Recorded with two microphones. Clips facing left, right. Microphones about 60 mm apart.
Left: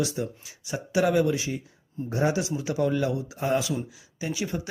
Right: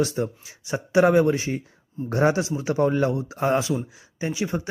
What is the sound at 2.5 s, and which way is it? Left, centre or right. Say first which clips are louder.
Speech: right 4 dB; right.